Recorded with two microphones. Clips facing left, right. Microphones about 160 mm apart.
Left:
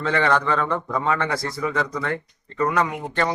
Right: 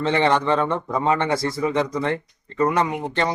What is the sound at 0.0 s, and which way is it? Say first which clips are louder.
A man's voice: right 2 dB; 25° right (ahead or behind).